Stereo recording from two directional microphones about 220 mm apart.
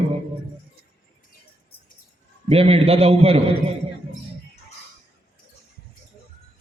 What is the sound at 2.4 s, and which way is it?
A man's voice, 25° right (ahead or behind).